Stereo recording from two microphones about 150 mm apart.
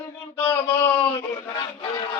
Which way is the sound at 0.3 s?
10° left (ahead or behind).